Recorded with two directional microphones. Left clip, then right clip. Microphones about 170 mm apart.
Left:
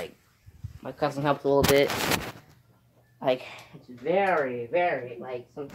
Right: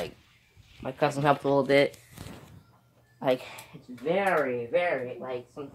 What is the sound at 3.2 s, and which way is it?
Speech, 30° right (ahead or behind).